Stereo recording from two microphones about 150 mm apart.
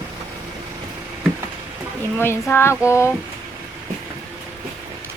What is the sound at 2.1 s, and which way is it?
Speech, 15° left (ahead or behind).